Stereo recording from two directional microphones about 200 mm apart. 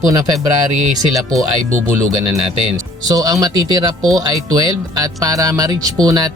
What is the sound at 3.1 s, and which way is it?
Speech, 20° right (ahead or behind).